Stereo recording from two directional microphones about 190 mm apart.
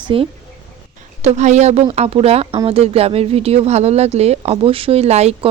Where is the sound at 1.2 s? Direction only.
35° right (ahead or behind).